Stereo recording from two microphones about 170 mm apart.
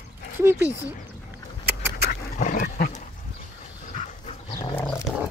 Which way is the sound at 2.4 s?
50° left (ahead or behind).